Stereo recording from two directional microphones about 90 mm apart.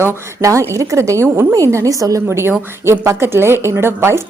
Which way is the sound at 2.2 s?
25° right (ahead or behind).